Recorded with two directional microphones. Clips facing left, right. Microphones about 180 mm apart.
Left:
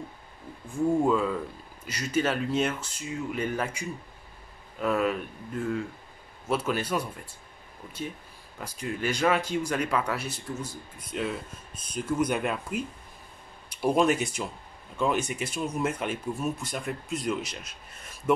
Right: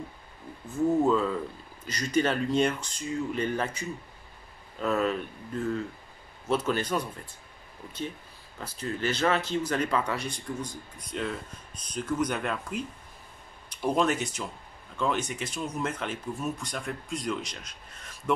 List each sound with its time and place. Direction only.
0.7 s speech: 10° left (ahead or behind)
8.5 s speech: 10° left (ahead or behind)